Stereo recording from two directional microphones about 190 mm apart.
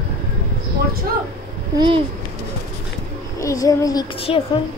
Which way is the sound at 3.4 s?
15° left (ahead or behind).